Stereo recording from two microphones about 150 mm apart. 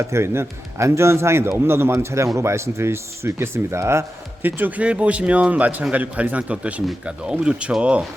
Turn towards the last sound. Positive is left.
turn(degrees=-5)  # may be behind; listen again after turning